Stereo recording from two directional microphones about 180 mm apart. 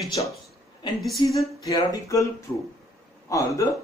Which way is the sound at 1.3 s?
20° left (ahead or behind).